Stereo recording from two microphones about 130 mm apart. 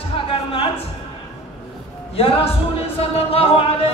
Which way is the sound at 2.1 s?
50° left (ahead or behind).